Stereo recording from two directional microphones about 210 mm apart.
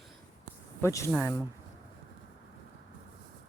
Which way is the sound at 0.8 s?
15° left (ahead or behind).